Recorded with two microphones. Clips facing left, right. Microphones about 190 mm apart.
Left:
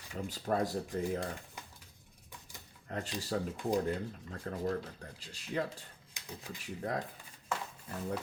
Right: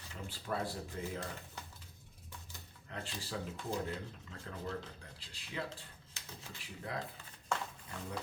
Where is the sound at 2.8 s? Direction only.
40° left (ahead or behind).